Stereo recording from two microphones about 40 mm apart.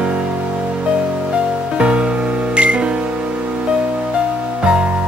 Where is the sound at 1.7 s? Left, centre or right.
Right.